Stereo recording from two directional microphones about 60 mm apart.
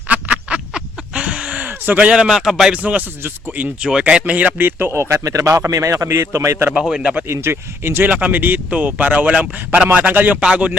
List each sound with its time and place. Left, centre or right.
0.1 s a sound: right
2.0 s a man's voice: centre
2.7 s speech: right
3.8 s a man's voice: centre
4.3 s speech: right
4.9 s a man's voice: right
6.9 s a man's voice: centre
7.4 s speech: right
10.4 s a man's voice: centre